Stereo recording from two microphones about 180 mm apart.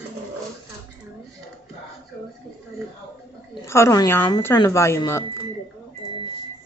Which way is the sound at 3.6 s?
15° left (ahead or behind).